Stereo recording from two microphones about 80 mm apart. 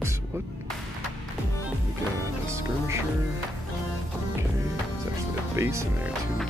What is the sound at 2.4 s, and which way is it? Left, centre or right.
Speech, right.